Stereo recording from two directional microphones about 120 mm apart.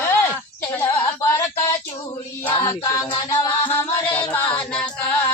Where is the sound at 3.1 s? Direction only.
35° left (ahead or behind).